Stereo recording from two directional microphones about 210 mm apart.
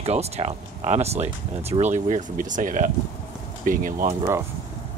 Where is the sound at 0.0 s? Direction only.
30° right (ahead or behind).